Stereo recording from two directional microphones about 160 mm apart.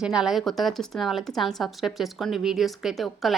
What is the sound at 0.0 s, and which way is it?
A woman's voice, 5° right (ahead or behind).